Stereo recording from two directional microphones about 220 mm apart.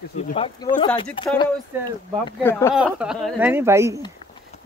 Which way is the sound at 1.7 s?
10° right (ahead or behind).